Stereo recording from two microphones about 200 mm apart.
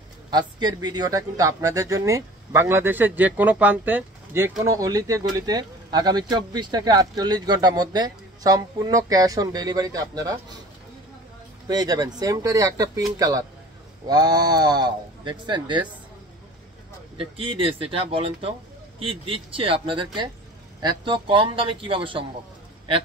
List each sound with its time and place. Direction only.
0.3 s speech: 20° right (ahead or behind)
11.6 s speech: 20° right (ahead or behind)
17.2 s speech: 25° right (ahead or behind)